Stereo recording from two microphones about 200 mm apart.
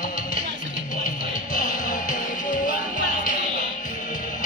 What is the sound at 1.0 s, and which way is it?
Music, 40° left (ahead or behind).